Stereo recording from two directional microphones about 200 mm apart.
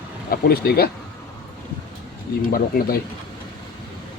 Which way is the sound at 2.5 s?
50° left (ahead or behind).